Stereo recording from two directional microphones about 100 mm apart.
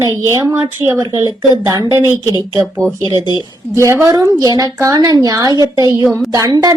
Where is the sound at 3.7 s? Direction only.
30° right (ahead or behind).